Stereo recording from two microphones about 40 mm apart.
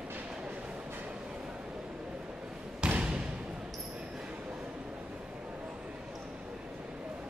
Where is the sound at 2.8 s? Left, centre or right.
Right.